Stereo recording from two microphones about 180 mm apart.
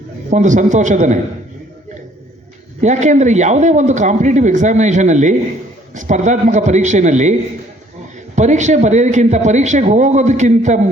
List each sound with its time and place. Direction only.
0.3 s a man's voice: 40° right (ahead or behind)
2.8 s speech: 40° right (ahead or behind)
8.4 s speech: 40° right (ahead or behind)